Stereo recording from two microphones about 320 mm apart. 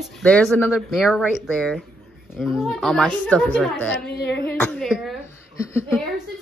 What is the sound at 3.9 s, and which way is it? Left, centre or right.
Speech, left.